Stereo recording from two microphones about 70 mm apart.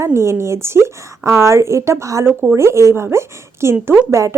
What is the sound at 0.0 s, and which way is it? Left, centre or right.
A woman's voice, right.